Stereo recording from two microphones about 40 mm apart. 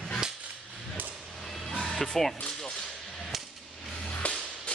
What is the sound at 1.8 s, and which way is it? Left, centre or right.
Speech, centre.